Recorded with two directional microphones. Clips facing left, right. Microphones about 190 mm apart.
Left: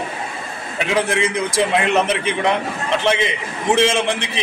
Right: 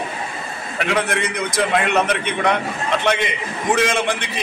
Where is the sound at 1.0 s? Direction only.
30° left (ahead or behind).